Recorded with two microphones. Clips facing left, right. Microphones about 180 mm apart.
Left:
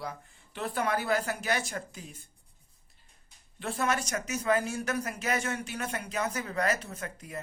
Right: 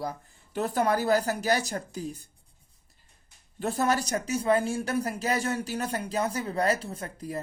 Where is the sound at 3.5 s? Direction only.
40° right (ahead or behind).